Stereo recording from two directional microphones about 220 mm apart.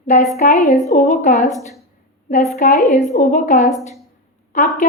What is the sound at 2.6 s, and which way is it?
A woman's voice, 35° left (ahead or behind).